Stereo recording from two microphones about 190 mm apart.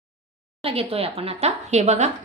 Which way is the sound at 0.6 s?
30° right (ahead or behind).